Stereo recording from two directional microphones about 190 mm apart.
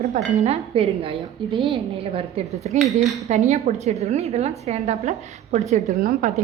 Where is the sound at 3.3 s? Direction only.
35° right (ahead or behind).